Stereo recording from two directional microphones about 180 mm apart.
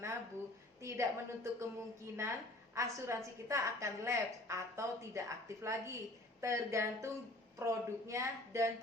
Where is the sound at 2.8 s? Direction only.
15° right (ahead or behind).